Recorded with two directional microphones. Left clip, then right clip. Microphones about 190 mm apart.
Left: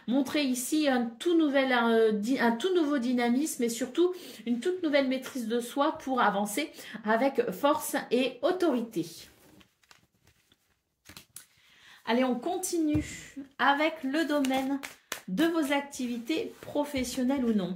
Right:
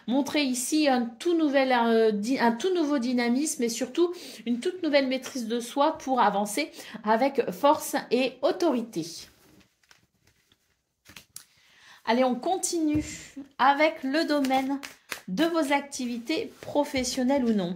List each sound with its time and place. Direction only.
0.0 s a woman's voice: 35° right (ahead or behind)
11.3 s a sound: 40° right (ahead or behind)
13.6 s a woman's voice: 40° right (ahead or behind)